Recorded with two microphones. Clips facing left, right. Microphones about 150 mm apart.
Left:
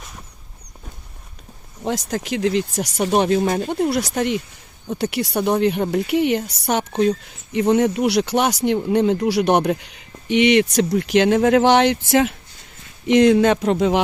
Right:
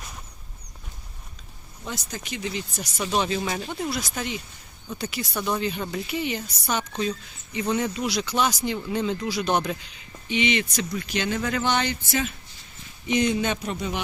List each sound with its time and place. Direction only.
1.8 s speech: 85° left
5.4 s speech: 65° left (ahead or behind); by 14.0 s 90° left